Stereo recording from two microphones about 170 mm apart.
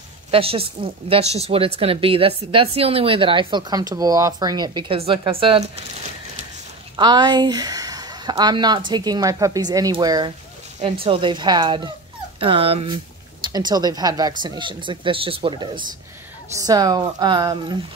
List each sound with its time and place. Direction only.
0.3 s a woman's voice: 35° right (ahead or behind)
7.0 s a woman's voice: 25° right (ahead or behind)
13.5 s speech: 25° right (ahead or behind)